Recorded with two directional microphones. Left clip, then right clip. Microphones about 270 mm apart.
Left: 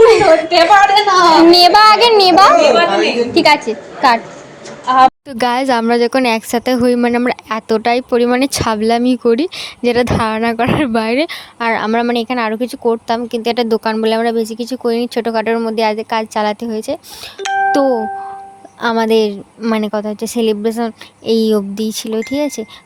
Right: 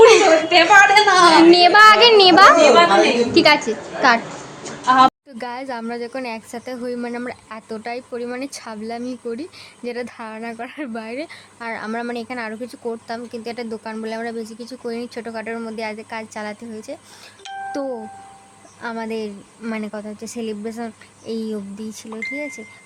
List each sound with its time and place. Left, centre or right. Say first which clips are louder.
0.0 s a sound: left 3 dB; centre
3.3 s a woman's voice: left 4 dB; centre
5.3 s speech: left 14 dB; left